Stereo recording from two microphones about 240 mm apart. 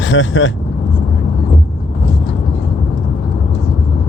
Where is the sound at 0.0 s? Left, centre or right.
Left.